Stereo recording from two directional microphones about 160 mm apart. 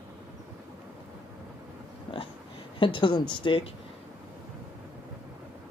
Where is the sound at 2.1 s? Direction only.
35° left (ahead or behind).